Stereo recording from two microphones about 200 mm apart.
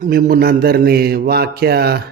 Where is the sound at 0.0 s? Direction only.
45° right (ahead or behind).